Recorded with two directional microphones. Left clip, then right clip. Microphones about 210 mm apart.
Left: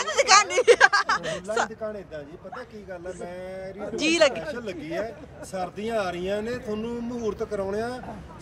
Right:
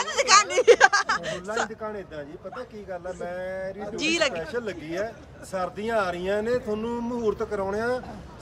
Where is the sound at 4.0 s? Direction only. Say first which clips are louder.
Left 4 dB; 5° right (ahead or behind).